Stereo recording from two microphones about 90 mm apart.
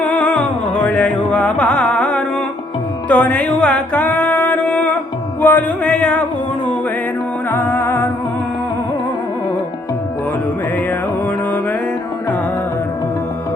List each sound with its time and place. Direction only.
0.0 s music: 15° left (ahead or behind)
7.5 s music: 25° left (ahead or behind)